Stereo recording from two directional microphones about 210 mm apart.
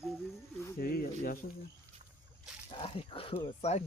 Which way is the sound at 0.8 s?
45° left (ahead or behind).